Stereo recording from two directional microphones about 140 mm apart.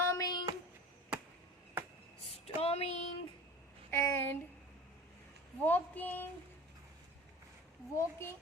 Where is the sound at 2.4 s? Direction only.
45° left (ahead or behind).